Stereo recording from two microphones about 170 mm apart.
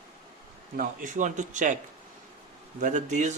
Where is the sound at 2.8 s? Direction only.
45° right (ahead or behind).